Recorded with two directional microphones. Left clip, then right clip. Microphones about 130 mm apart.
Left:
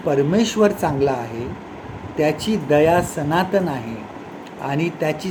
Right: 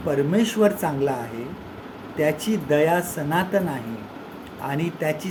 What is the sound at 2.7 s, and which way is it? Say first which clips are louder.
Speech: left 5 dB; 5° left (ahead or behind).